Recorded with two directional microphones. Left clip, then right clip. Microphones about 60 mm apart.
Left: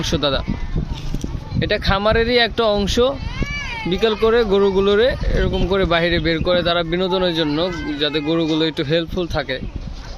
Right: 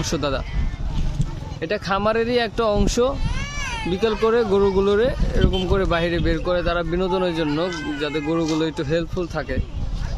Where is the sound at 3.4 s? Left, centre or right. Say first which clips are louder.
Left 2 dB; right.